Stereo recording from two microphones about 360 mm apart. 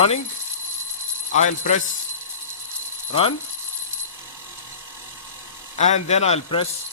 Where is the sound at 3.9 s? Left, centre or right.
Centre.